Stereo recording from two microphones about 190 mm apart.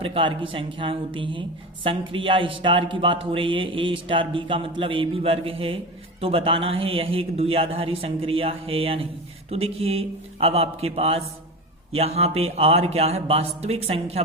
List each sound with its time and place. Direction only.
0.0 s speech: 30° right (ahead or behind)